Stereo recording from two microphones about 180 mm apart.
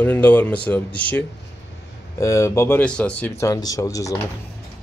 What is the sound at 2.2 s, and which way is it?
Speech, 15° left (ahead or behind).